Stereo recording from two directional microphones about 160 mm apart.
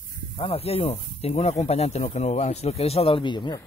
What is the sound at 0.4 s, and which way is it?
Speech, 35° left (ahead or behind).